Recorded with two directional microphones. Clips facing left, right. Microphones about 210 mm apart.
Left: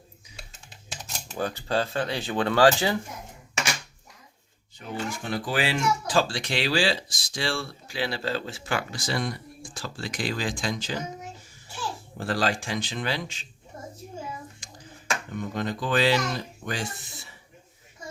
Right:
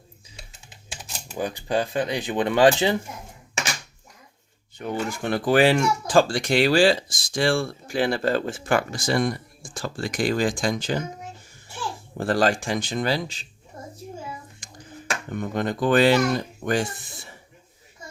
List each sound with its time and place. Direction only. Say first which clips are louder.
1.3 s speech: right 2 dB; 15° right (ahead or behind)
4.8 s speech: right 5 dB; 55° right (ahead or behind)
12.1 s speech: right 6 dB; 50° right (ahead or behind)
15.4 s speech: right 6 dB; 55° right (ahead or behind)